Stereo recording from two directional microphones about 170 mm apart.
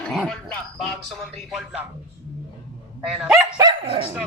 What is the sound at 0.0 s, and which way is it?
Speech, 5° left (ahead or behind).